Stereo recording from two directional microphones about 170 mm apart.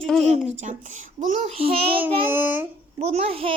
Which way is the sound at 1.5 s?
35° right (ahead or behind).